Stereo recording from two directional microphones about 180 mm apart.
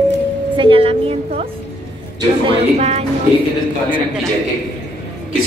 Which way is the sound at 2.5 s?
35° right (ahead or behind).